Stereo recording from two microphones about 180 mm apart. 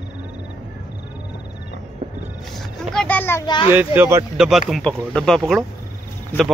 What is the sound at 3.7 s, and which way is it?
Speech, 10° right (ahead or behind).